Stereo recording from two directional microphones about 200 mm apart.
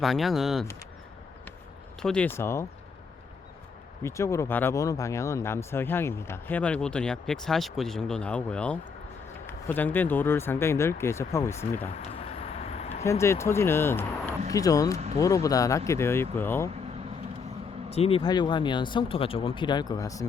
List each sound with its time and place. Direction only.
0.0 s speech: centre (ahead or behind)
2.0 s speech: 5° left (ahead or behind)
4.0 s speech: 15° left (ahead or behind)
12.4 s vehicle: 30° left (ahead or behind)
13.1 s speech: 15° left (ahead or behind)
17.8 s speech: 30° left (ahead or behind)